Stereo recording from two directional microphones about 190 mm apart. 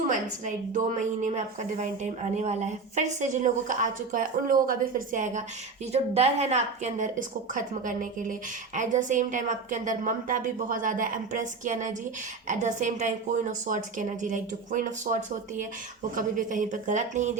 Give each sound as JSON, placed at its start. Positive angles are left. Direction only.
{"t": 0.1, "sound": "speech", "side_deg": -40}
{"t": 2.3, "sound": "speech", "side_deg": -35}